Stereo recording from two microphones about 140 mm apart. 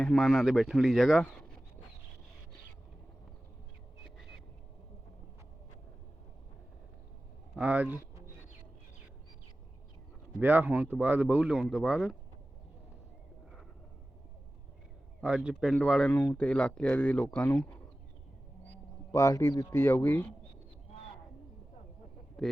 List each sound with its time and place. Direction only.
0.0 s speech: 5° left (ahead or behind)
7.5 s speech: 10° right (ahead or behind)
10.4 s speech: 10° right (ahead or behind)
15.4 s speech: centre (ahead or behind)
16.0 s speech: 15° left (ahead or behind)
19.1 s speech: 20° left (ahead or behind)
22.4 s speech: centre (ahead or behind)